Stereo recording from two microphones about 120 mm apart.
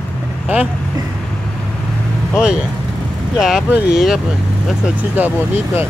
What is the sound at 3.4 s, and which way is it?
Speech, 5° right (ahead or behind).